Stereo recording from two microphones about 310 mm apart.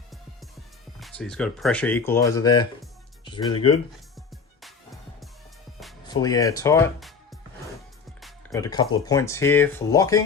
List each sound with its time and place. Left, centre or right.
0.9 s speech: centre
4.6 s music: centre
6.1 s speech: centre